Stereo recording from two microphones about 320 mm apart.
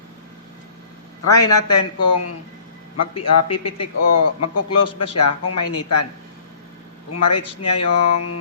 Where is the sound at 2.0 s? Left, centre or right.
Left.